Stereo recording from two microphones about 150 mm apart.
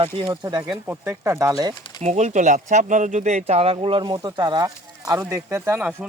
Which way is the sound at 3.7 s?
35° right (ahead or behind).